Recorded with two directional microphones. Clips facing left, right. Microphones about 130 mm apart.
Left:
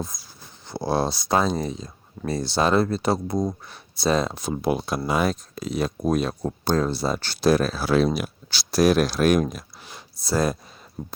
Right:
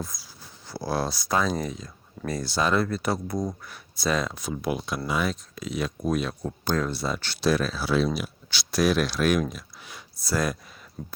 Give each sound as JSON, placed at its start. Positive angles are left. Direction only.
{"t": 0.1, "sound": "a sound", "side_deg": 50}
{"t": 0.7, "sound": "speech", "side_deg": 25}
{"t": 5.0, "sound": "speech", "side_deg": 40}
{"t": 8.4, "sound": "speech", "side_deg": 35}
{"t": 9.8, "sound": "speech", "side_deg": 25}